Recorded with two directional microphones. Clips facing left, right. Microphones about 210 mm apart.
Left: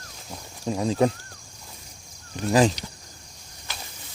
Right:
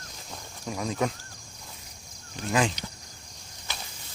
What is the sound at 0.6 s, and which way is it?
Speech, 30° left (ahead or behind).